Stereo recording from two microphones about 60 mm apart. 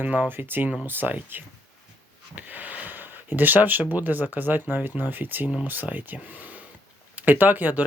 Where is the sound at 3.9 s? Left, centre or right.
Right.